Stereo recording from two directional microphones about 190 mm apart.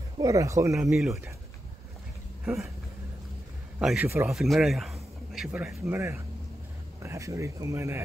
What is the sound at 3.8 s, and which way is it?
A man's voice, 5° right (ahead or behind).